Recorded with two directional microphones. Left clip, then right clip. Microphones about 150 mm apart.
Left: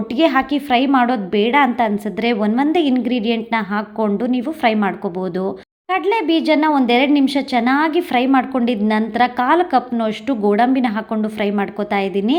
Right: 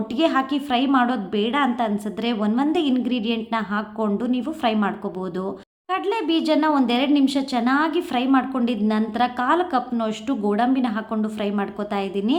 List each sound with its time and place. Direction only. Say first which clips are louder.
0.1 s a woman's voice: left 5 dB; 20° left (ahead or behind)